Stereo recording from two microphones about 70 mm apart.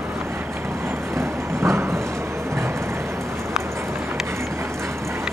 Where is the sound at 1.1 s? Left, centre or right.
Right.